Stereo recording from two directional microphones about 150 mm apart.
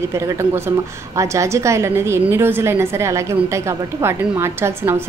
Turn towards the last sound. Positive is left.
turn(degrees=-15)  # may be behind; listen again after turning